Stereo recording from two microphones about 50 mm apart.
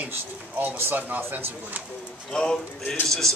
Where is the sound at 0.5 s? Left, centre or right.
Right.